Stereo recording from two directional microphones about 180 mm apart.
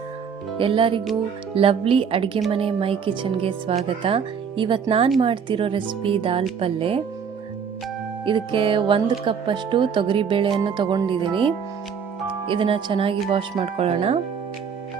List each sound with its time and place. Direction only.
0.6 s speech: 30° right (ahead or behind)
8.2 s speech: 30° right (ahead or behind)